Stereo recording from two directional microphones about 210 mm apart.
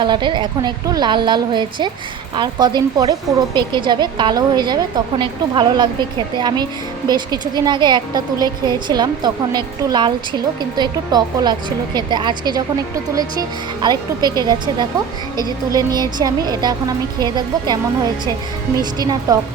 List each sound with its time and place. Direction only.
0.0 s a woman's voice: 20° right (ahead or behind)
13.8 s a woman's voice: 20° right (ahead or behind)
15.7 s a woman's voice: 20° right (ahead or behind)
18.8 s a woman's voice: 20° right (ahead or behind)